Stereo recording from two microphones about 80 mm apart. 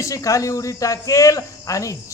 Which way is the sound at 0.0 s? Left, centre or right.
Left.